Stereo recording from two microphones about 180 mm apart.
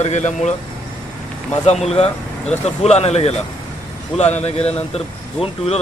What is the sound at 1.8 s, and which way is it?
A man's voice, 35° left (ahead or behind).